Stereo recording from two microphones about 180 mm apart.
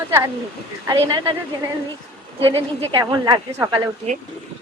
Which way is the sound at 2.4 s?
30° right (ahead or behind).